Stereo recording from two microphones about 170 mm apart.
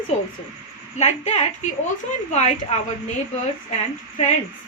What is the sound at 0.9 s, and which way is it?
A woman's voice, 40° left (ahead or behind).